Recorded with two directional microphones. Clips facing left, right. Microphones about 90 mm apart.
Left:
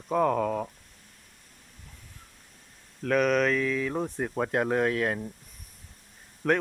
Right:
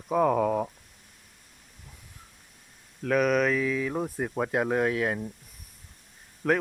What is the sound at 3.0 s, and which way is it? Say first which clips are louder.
Speech: even; 5° right (ahead or behind).